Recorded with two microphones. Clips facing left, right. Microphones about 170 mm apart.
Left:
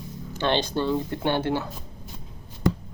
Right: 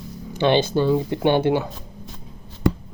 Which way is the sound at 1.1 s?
15° right (ahead or behind).